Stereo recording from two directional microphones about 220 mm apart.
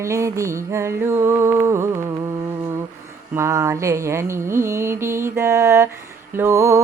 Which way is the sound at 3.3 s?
10° right (ahead or behind).